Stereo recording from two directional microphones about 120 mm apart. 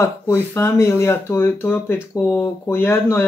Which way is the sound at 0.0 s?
20° left (ahead or behind).